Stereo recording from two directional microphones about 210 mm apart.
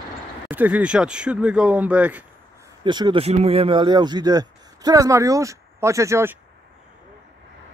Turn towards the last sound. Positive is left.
turn(degrees=-15)  # may be behind; listen again after turning